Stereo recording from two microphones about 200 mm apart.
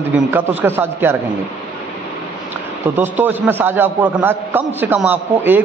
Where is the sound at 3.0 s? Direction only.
10° right (ahead or behind).